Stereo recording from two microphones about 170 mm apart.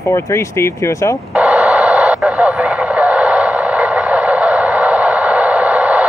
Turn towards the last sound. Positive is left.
turn(degrees=-10)  # may be behind; listen again after turning